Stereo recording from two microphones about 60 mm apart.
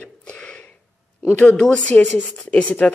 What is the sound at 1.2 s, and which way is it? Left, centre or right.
Speech, left.